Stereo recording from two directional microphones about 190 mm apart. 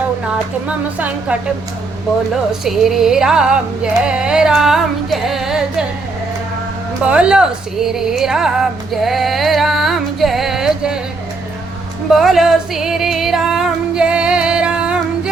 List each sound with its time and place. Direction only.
0.9 s a woman's voice: 10° right (ahead or behind)
2.3 s music: centre (ahead or behind)
7.0 s speech: 5° right (ahead or behind)
12.1 s female singing: centre (ahead or behind)